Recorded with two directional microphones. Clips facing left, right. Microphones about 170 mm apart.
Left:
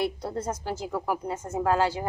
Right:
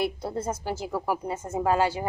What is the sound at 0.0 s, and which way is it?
A woman's voice, 5° right (ahead or behind).